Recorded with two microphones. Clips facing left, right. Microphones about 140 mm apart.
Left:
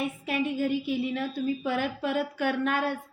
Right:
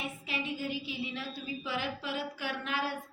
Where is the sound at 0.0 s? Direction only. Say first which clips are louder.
Left 9 dB; 55° left (ahead or behind).